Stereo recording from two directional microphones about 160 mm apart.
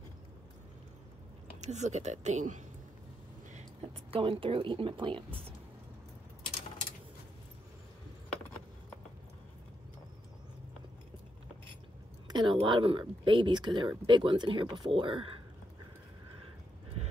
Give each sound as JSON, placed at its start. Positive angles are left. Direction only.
{"t": 1.6, "sound": "speech", "side_deg": -45}
{"t": 3.5, "sound": "speech", "side_deg": -40}
{"t": 12.3, "sound": "a woman's voice", "side_deg": -30}
{"t": 17.0, "sound": "a sound", "side_deg": -40}